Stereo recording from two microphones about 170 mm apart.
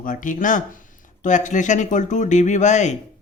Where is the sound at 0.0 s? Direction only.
50° left (ahead or behind).